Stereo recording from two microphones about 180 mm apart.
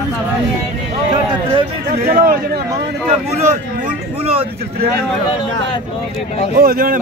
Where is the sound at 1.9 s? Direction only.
55° right (ahead or behind).